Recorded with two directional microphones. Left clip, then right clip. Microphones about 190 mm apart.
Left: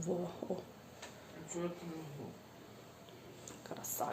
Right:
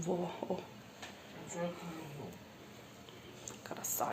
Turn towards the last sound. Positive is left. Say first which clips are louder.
# right 2 dB
turn(degrees=0)  # may be behind; listen again after turning